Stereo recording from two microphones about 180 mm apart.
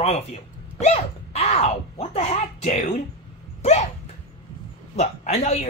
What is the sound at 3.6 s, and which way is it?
Hiccup, 40° left (ahead or behind).